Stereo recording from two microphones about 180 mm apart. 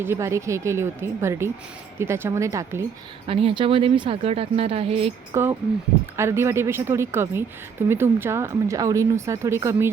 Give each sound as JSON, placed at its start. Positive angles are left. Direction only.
{"t": 0.0, "sound": "speech", "side_deg": -15}
{"t": 3.2, "sound": "speech", "side_deg": -30}
{"t": 5.3, "sound": "speech", "side_deg": -15}